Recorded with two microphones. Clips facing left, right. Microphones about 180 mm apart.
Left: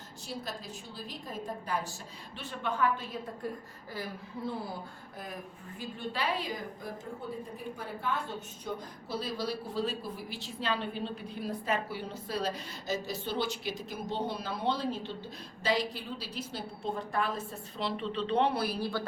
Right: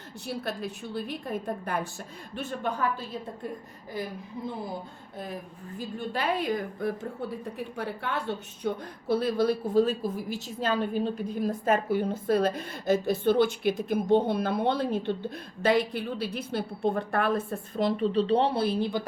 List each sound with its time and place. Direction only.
0.3 s a woman's voice: 60° right (ahead or behind)
2.3 s a woman's voice: 45° right (ahead or behind)
6.0 s a woman's voice: 50° right (ahead or behind); by 8.8 s 65° right (ahead or behind)
9.0 s a woman's voice: 55° right (ahead or behind); by 19.0 s 20° right (ahead or behind)